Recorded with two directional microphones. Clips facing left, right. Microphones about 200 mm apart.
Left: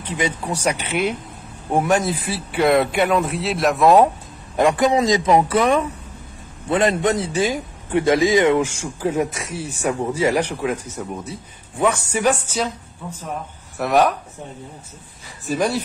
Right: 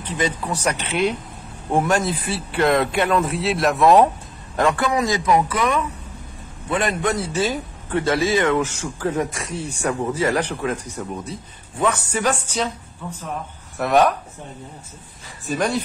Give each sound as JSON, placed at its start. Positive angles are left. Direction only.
{"t": 0.1, "sound": "a man's voice", "side_deg": 10}
{"t": 4.6, "sound": "a man's voice", "side_deg": 15}
{"t": 13.7, "sound": "a man's voice", "side_deg": 0}
{"t": 15.4, "sound": "a man's voice", "side_deg": 0}